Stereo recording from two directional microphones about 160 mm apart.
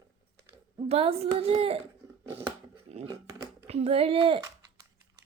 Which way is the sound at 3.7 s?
40° right (ahead or behind).